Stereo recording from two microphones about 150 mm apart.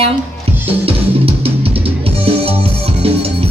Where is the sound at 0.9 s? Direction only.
40° right (ahead or behind).